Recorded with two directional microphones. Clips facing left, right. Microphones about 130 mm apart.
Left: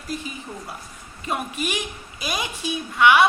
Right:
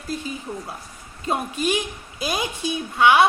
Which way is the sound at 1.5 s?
10° left (ahead or behind).